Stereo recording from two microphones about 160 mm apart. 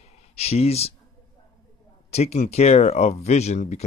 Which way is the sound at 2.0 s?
40° left (ahead or behind).